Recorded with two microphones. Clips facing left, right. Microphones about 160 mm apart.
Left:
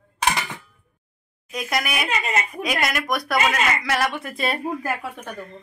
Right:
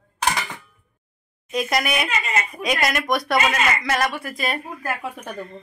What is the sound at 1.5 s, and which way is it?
Speech, centre (ahead or behind).